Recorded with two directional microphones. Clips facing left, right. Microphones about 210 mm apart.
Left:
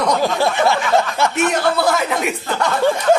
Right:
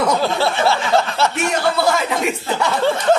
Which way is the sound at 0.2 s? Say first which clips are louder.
Left 1 dB; 15° left (ahead or behind).